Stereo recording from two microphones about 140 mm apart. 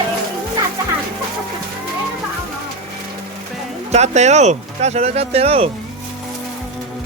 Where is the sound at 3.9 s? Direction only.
55° right (ahead or behind).